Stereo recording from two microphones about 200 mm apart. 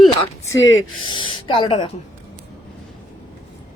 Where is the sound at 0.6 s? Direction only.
80° left.